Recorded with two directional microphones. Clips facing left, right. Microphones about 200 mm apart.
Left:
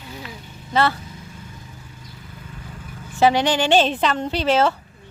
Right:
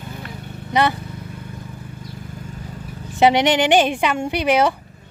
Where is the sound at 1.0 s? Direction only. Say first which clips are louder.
Right 5 dB; 60° right (ahead or behind).